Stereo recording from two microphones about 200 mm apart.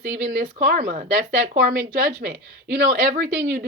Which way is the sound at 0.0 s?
45° right (ahead or behind).